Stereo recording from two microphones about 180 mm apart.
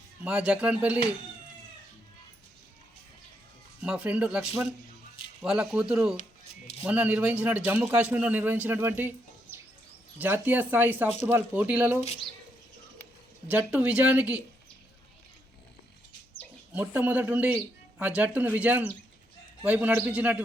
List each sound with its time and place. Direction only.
0.3 s a man's voice: 5° right (ahead or behind)
3.8 s a man's voice: 5° right (ahead or behind)
11.9 s speech: 35° left (ahead or behind)
13.5 s a man's voice: 10° right (ahead or behind)
16.7 s a man's voice: 10° right (ahead or behind)